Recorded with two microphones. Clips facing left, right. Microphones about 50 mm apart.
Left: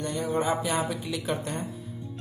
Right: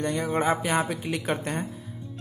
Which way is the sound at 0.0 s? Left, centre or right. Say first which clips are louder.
Right 2 dB; right.